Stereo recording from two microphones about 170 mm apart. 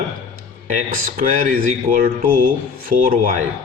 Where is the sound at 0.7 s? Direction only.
50° right (ahead or behind).